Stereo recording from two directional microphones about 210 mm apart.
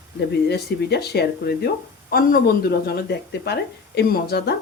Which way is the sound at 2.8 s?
50° left (ahead or behind).